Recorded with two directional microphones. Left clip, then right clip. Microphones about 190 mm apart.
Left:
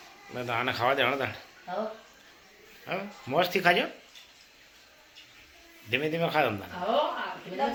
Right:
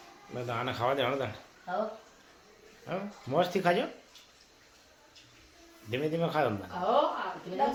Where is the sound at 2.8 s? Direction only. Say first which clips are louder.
Left 3 dB; 5° left (ahead or behind).